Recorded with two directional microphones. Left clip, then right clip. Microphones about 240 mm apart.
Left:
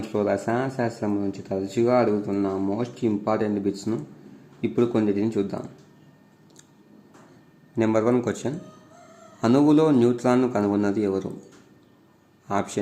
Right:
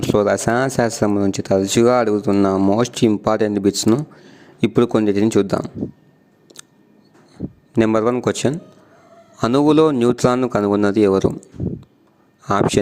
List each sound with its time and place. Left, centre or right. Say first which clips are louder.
0.1 s speech: right 8 dB; right
7.8 s speech: right 5 dB; right
12.5 s speech: right 10 dB; right